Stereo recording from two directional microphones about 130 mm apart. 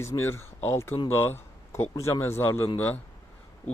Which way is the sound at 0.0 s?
20° left (ahead or behind).